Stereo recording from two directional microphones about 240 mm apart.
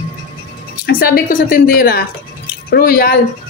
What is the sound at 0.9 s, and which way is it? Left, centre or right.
A woman's voice, left.